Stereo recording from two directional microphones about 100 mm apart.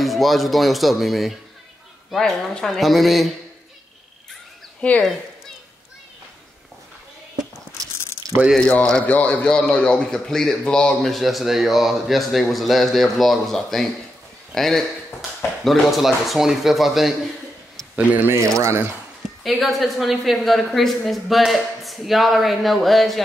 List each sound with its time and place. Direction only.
0.0 s a man's voice: centre (ahead or behind)
4.8 s speech: 10° left (ahead or behind)
8.5 s a man's voice: 10° left (ahead or behind)
17.9 s speech: 20° right (ahead or behind)
19.4 s a man's voice: centre (ahead or behind)